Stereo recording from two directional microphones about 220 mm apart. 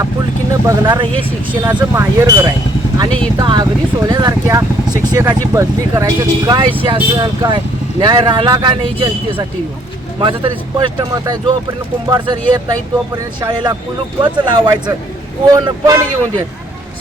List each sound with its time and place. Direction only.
0.7 s speech: 15° right (ahead or behind)